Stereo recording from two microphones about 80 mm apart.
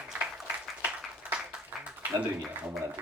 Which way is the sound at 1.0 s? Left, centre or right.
Centre.